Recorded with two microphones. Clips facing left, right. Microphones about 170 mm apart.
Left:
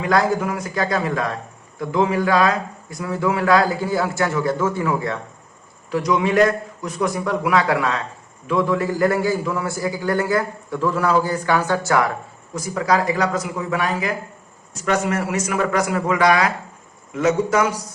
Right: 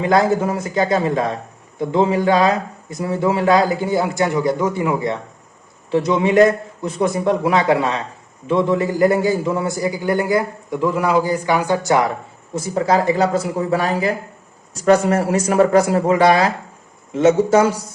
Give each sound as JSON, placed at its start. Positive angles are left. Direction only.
{"t": 0.0, "sound": "a man's voice", "side_deg": -25}